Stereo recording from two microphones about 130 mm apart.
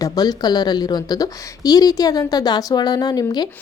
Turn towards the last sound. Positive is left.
turn(degrees=30)  # may be behind; listen again after turning